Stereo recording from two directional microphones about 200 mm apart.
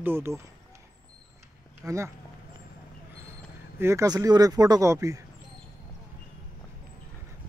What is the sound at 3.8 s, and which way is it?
Speech, 15° right (ahead or behind).